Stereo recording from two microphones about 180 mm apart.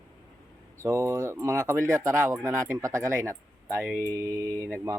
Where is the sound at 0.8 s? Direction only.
15° right (ahead or behind).